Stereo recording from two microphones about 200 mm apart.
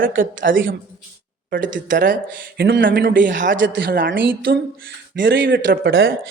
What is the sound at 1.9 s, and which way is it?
Speech, 40° right (ahead or behind).